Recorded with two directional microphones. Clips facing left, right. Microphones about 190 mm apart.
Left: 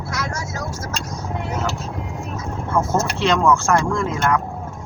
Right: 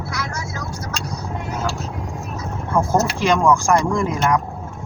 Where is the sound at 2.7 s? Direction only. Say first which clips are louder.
Right 2 dB; 15° right (ahead or behind).